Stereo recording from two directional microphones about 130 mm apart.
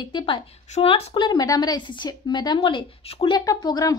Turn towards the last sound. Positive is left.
turn(degrees=30)  # may be behind; listen again after turning